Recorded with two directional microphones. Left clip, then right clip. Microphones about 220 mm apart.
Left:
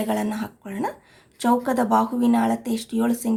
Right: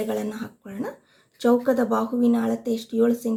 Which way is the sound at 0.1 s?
45° left (ahead or behind).